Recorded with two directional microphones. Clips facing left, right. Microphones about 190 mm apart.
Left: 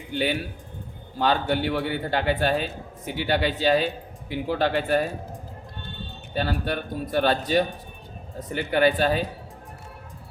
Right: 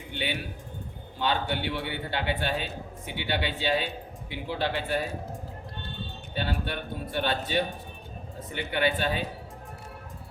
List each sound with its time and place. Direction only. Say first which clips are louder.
0.1 s a man's voice: left 7 dB; 40° left (ahead or behind)
6.3 s a man's voice: left 5 dB; 40° left (ahead or behind)